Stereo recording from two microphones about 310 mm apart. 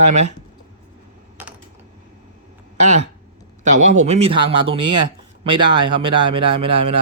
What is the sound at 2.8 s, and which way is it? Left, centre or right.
A man's voice, right.